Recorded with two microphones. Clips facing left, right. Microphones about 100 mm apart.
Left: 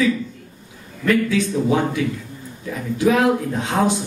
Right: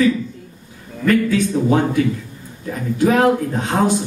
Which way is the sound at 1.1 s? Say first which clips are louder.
Right 2 dB; 45° right (ahead or behind).